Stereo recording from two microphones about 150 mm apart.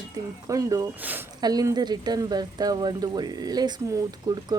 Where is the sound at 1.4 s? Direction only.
25° right (ahead or behind).